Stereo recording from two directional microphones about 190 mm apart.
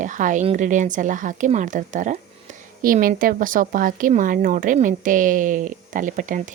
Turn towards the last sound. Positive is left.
turn(degrees=-45)  # may be behind; listen again after turning